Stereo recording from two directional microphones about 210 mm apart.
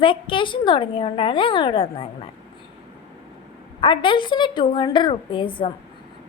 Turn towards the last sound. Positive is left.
turn(degrees=25)  # may be behind; listen again after turning